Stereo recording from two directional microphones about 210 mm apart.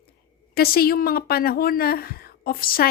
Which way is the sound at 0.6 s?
45° left (ahead or behind).